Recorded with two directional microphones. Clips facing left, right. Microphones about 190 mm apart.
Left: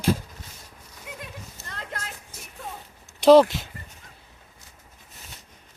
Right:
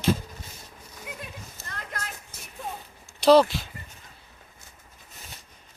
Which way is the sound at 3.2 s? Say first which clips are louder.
Left 3 dB; 20° left (ahead or behind).